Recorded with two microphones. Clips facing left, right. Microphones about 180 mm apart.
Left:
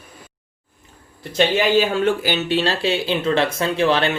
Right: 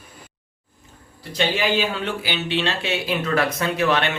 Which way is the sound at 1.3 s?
45° left (ahead or behind).